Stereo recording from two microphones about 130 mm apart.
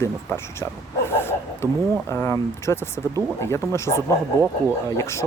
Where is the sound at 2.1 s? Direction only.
20° left (ahead or behind).